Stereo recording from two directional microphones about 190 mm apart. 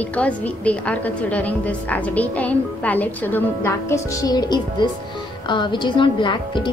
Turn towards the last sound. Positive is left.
turn(degrees=25)  # may be behind; listen again after turning